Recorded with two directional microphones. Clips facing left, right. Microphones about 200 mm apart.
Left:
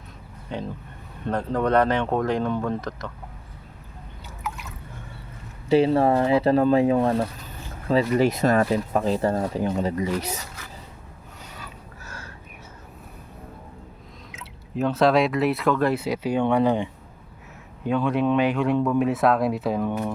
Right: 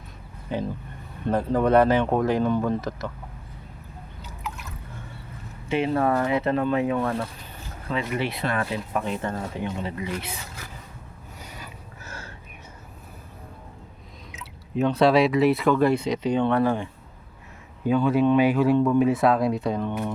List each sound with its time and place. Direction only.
0.5 s speech: 5° right (ahead or behind)
5.6 s speech: 35° left (ahead or behind)
12.0 s a sound: 25° right (ahead or behind)
14.8 s speech: centre (ahead or behind); by 16.9 s 15° left (ahead or behind)
17.8 s speech: centre (ahead or behind)